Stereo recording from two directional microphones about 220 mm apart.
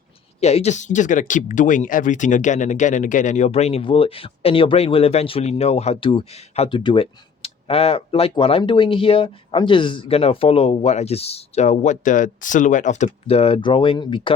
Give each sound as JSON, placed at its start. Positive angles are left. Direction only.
{"t": 0.3, "sound": "speech", "side_deg": 30}